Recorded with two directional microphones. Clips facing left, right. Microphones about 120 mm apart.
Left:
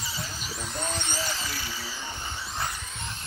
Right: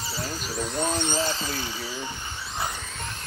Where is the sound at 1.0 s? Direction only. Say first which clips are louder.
Right 6 dB; 20° right (ahead or behind).